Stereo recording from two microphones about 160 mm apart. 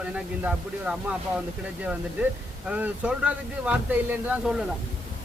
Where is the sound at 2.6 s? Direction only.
10° right (ahead or behind).